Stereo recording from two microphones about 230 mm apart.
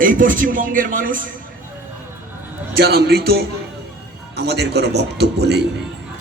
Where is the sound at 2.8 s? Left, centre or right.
Right.